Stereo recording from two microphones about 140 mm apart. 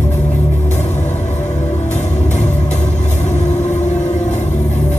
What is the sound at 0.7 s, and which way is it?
Music, 55° left (ahead or behind).